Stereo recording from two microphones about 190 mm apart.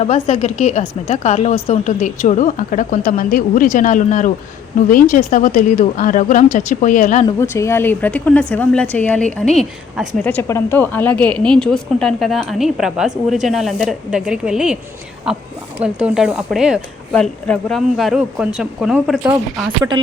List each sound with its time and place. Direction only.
0.0 s a woman's voice: 35° left (ahead or behind)
7.3 s a woman's voice: 15° left (ahead or behind)